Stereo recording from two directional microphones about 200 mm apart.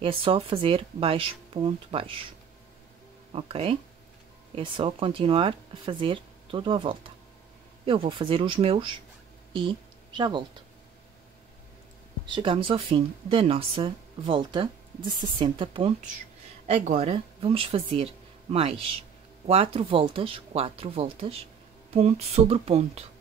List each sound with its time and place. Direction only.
0.0 s speech: 25° right (ahead or behind)
3.3 s speech: 30° right (ahead or behind)
12.3 s speech: 25° right (ahead or behind)